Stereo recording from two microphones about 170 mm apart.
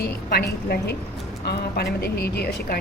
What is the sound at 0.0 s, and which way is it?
A woman's voice, 65° left (ahead or behind).